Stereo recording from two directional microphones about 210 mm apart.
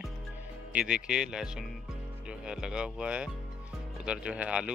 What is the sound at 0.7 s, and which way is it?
Speech, 5° right (ahead or behind).